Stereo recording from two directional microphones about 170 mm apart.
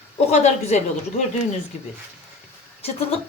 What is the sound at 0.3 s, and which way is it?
Speech, 40° left (ahead or behind).